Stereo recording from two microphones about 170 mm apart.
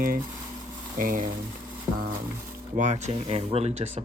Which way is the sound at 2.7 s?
45° right (ahead or behind).